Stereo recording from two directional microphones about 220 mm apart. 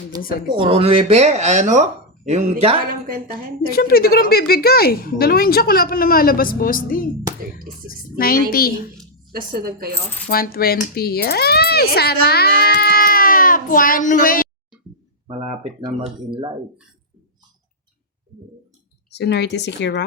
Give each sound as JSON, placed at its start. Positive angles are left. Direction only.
{"t": 0.4, "sound": "speech", "side_deg": -20}
{"t": 3.7, "sound": "a woman's voice", "side_deg": 45}
{"t": 9.5, "sound": "a woman's voice", "side_deg": -40}
{"t": 10.2, "sound": "a child's voice", "side_deg": 45}
{"t": 15.3, "sound": "speech", "side_deg": -30}
{"t": 19.1, "sound": "speech", "side_deg": 50}